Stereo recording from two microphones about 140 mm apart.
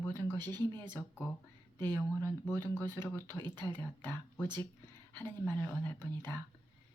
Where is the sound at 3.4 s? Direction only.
30° right (ahead or behind).